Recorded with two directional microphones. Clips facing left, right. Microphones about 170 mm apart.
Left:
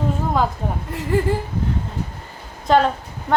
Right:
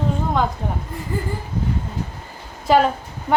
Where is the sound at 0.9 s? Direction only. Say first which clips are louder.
Left 11 dB; 75° left (ahead or behind).